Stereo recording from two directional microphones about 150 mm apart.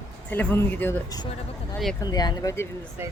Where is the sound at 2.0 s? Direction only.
25° left (ahead or behind).